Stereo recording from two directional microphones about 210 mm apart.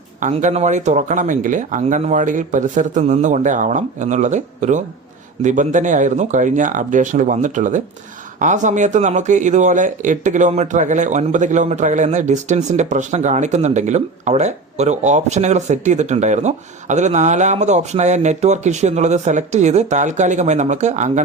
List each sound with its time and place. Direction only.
0.2 s speech: 35° right (ahead or behind)